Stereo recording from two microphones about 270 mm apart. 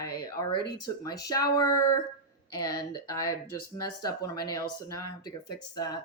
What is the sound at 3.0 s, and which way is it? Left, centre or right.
Speech, centre.